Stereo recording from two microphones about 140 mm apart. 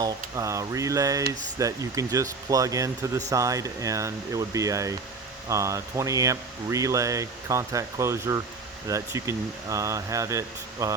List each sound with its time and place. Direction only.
0.0 s speech: 25° right (ahead or behind)